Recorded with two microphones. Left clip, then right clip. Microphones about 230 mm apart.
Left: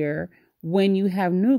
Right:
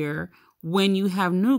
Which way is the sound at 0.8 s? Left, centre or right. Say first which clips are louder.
Left 2 dB; centre.